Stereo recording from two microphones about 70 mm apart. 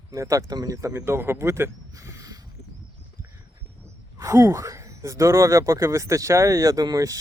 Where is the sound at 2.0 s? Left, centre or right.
Right.